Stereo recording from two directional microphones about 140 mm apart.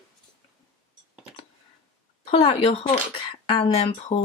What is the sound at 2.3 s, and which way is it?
Speech, 45° left (ahead or behind).